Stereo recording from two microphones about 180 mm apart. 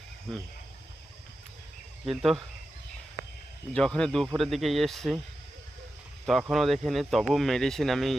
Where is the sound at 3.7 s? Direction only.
5° left (ahead or behind).